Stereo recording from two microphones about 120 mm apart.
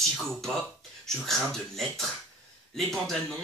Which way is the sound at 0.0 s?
Centre (ahead or behind).